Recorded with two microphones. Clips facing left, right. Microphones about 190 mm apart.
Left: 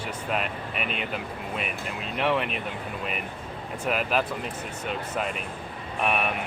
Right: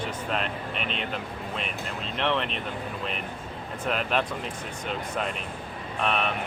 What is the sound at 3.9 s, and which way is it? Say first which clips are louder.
Speech: left 1 dB; 5° left (ahead or behind).